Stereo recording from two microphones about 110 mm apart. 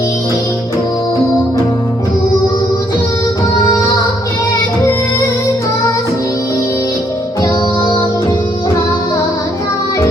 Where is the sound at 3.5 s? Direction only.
35° left (ahead or behind).